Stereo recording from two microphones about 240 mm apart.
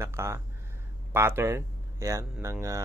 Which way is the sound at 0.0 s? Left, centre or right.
Centre.